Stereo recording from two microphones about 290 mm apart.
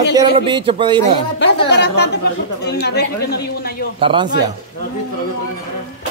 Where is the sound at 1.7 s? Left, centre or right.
Left.